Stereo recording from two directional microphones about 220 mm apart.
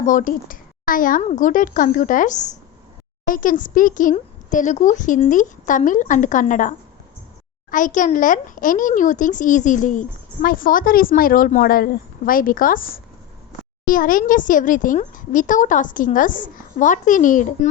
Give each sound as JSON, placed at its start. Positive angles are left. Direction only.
{"t": 0.0, "sound": "a child's voice", "side_deg": 35}